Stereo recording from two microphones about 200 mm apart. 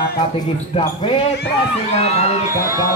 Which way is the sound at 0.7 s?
25° left (ahead or behind).